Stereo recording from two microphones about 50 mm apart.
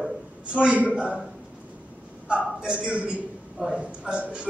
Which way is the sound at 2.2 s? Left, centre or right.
Right.